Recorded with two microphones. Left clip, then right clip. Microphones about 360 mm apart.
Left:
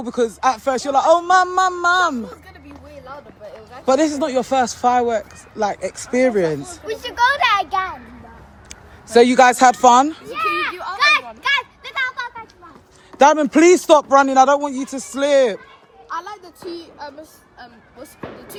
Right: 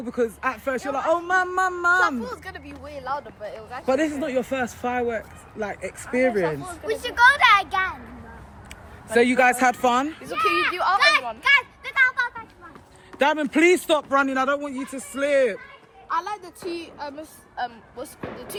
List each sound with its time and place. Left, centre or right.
0.0 s speech: centre
10.3 s speech: left
11.4 s a sound: left
13.2 s speech: left
14.1 s speech: centre
16.0 s a sound: right